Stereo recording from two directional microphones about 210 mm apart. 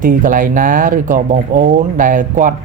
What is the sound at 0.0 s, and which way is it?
Speech, 40° right (ahead or behind).